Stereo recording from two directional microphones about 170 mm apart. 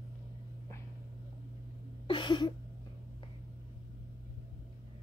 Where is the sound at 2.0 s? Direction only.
30° left (ahead or behind).